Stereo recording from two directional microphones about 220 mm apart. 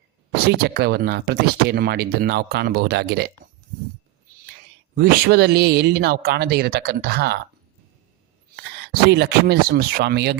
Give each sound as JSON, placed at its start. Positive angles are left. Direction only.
{"t": 0.4, "sound": "speech", "side_deg": -45}
{"t": 4.9, "sound": "speech", "side_deg": -45}
{"t": 8.5, "sound": "speech", "side_deg": -45}